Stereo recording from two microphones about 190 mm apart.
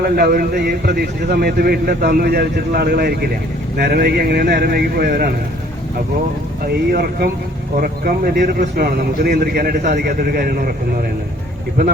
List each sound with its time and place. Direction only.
0.0 s a man's voice: 55° right (ahead or behind)
6.9 s speech: 55° right (ahead or behind)